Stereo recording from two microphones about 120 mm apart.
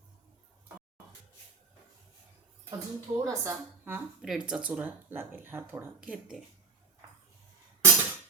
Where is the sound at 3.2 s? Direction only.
25° right (ahead or behind).